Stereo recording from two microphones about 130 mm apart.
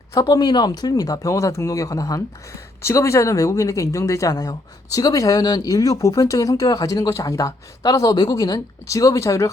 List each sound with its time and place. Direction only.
0.1 s speech: 30° left (ahead or behind)